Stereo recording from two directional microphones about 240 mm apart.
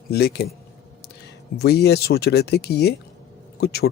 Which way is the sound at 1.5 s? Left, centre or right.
Left.